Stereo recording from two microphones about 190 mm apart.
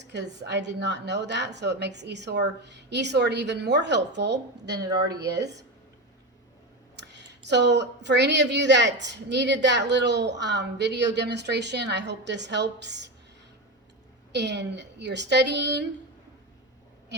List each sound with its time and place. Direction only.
0.0 s speech: 65° right (ahead or behind)
6.9 s speech: 65° right (ahead or behind)
14.3 s speech: 65° right (ahead or behind)